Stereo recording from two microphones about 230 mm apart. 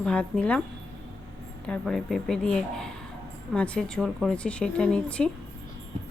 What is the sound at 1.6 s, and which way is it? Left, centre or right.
Speech, centre.